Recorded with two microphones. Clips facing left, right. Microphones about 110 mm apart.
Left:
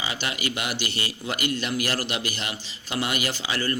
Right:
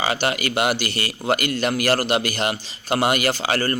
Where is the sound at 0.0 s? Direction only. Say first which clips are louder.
Right 8 dB; 65° right (ahead or behind).